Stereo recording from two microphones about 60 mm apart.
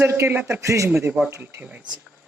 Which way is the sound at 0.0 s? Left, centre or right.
Right.